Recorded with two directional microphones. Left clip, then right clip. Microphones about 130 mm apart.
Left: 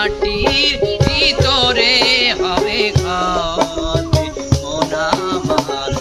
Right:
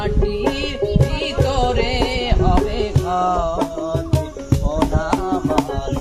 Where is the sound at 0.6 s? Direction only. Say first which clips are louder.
Left 6 dB; 65° right (ahead or behind).